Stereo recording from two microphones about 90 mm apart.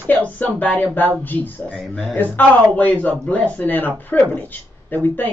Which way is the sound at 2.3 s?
20° left (ahead or behind).